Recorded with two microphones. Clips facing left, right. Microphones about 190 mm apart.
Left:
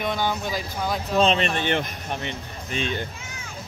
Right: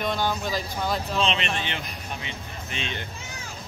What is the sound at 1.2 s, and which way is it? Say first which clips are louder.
Speech: left 10 dB; 45° left (ahead or behind).